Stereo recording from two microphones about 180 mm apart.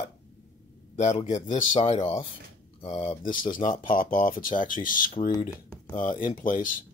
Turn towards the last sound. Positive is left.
turn(degrees=50)  # may be behind; listen again after turning